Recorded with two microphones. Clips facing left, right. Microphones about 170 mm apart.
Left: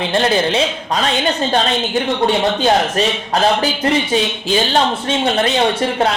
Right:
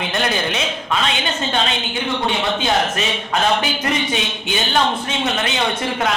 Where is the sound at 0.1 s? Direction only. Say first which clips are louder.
Left 7 dB; 30° left (ahead or behind).